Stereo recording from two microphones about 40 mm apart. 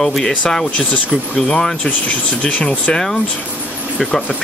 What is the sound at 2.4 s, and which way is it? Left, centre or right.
Speech, left.